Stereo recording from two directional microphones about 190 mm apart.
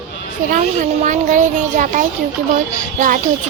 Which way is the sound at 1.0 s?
40° right (ahead or behind).